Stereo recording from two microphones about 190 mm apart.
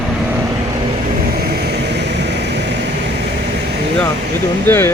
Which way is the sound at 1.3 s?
55° right (ahead or behind).